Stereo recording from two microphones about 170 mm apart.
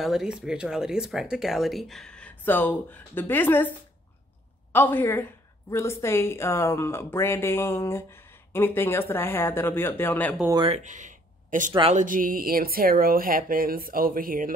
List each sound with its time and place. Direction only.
0.0 s speech: centre (ahead or behind)
4.7 s a woman's voice: 10° left (ahead or behind)
10.7 s speech: 45° right (ahead or behind)